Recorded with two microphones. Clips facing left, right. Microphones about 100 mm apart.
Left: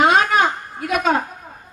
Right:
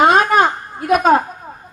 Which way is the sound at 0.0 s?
45° right (ahead or behind).